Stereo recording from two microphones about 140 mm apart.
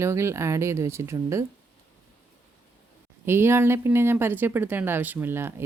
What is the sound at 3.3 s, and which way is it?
Speech, 15° right (ahead or behind).